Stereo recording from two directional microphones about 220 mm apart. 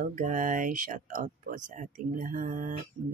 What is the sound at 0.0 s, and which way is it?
Speech, 35° right (ahead or behind).